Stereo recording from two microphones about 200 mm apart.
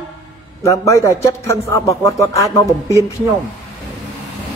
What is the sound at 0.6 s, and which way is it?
A man's voice, 15° left (ahead or behind).